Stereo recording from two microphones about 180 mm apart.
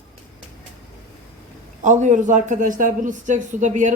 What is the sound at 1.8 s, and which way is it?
A man's voice, 40° right (ahead or behind).